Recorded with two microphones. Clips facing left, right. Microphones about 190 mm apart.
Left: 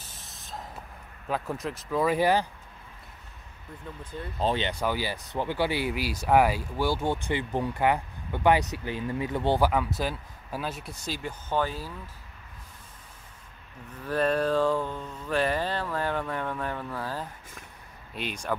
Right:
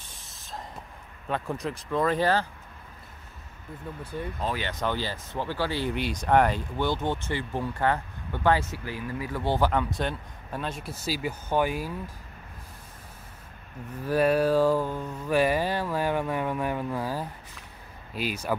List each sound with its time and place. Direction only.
0.0 s spray: centre (ahead or behind)
1.3 s speech: centre (ahead or behind)
4.0 s speech: 10° right (ahead or behind)
4.4 s speech: 30° left (ahead or behind)
4.6 s speech: 10° left (ahead or behind)
9.7 s speech: 5° left (ahead or behind); by 11.9 s 15° right (ahead or behind)
14.0 s speech: 10° right (ahead or behind)